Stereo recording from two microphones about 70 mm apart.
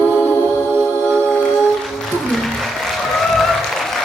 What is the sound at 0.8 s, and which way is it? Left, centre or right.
Music, right.